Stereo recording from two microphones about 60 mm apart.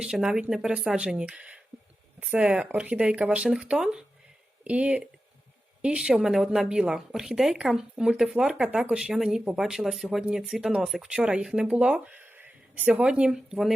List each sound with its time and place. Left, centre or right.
0.0 s speech: centre
6.1 s speech: centre
11.1 s speech: centre
12.9 s speech: centre
13.3 s speech: centre